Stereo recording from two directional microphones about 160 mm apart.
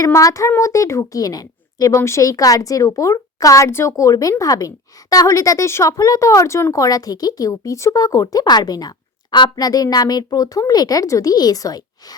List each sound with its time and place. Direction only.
0.0 s a woman's voice: 20° left (ahead or behind)